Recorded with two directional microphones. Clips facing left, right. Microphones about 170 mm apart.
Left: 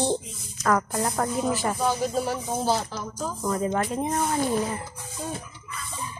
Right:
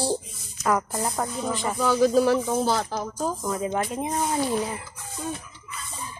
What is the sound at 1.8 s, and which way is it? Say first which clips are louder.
Speech: right 11 dB; 90° right.